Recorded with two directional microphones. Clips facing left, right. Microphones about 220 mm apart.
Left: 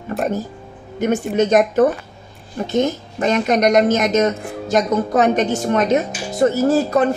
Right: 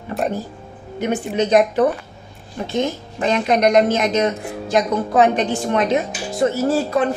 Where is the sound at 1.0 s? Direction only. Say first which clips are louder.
Left 3 dB; 45° left (ahead or behind).